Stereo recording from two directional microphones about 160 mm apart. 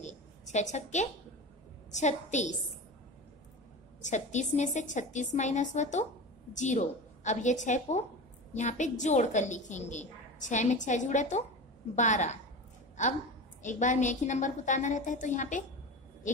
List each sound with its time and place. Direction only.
0.0 s a sound: 45° left (ahead or behind)
2.0 s a woman's voice: 45° left (ahead or behind)
4.0 s a woman's voice: 50° left (ahead or behind)
13.6 s a woman's voice: 50° left (ahead or behind)